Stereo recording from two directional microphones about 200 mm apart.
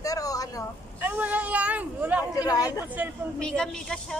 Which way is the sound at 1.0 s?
10° right (ahead or behind).